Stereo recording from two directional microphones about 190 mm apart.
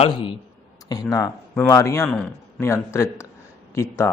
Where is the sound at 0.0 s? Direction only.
25° left (ahead or behind).